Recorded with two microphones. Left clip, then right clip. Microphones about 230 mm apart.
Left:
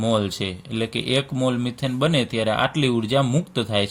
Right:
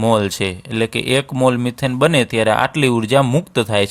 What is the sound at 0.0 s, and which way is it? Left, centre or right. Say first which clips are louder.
Speech: right 7 dB; right.